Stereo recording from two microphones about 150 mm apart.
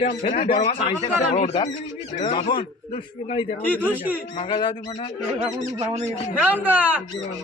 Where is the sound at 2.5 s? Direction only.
35° left (ahead or behind).